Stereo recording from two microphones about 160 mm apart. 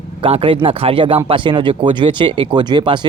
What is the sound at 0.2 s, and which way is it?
A man's voice, 35° right (ahead or behind).